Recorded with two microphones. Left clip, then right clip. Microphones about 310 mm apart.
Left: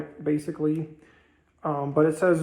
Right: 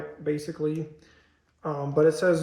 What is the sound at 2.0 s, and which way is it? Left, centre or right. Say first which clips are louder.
Speech: right 2 dB; centre.